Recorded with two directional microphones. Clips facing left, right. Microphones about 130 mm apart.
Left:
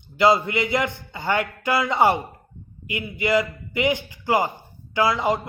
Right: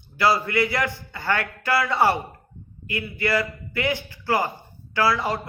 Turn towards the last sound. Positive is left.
turn(degrees=20)  # may be behind; listen again after turning